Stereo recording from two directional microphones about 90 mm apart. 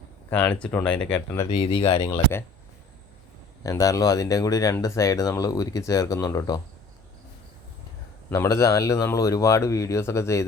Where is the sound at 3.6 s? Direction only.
40° left (ahead or behind).